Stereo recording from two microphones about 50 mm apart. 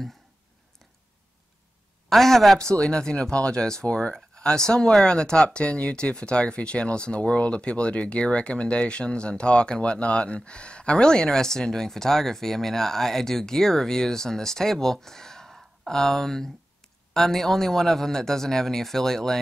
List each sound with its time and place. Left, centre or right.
2.0 s a woman's voice: centre
2.6 s speech: centre